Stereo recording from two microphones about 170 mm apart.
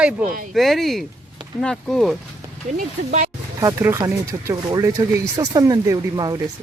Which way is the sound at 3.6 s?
15° right (ahead or behind).